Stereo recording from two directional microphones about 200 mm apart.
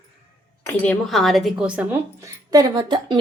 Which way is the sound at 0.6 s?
5° left (ahead or behind).